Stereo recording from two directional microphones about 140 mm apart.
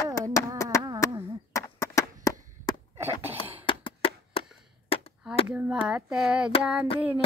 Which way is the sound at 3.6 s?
40° left (ahead or behind).